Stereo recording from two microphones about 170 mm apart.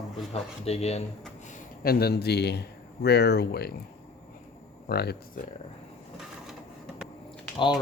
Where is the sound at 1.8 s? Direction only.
65° left (ahead or behind).